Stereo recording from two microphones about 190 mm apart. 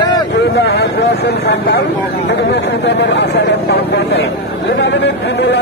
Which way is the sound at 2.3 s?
65° left (ahead or behind).